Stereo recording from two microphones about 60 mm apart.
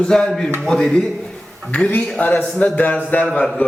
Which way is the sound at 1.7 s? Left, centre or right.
Left.